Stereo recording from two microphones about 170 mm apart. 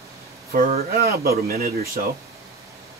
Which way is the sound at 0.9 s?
65° right (ahead or behind).